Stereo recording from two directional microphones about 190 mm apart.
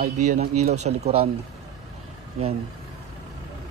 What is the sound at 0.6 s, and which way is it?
Speech, 35° right (ahead or behind).